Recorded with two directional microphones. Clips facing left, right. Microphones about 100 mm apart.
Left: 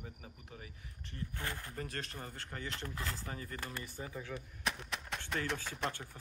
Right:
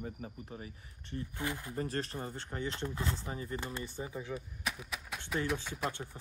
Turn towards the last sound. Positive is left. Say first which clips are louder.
# right 3 dB
turn(degrees=-5)  # may be behind; listen again after turning